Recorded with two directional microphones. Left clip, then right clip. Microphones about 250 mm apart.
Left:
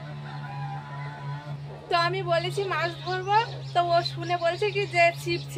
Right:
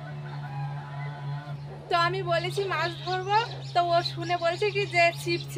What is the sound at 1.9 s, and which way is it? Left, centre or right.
Speech, centre.